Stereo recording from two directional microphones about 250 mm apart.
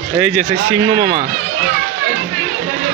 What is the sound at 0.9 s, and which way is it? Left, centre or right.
Speech, right.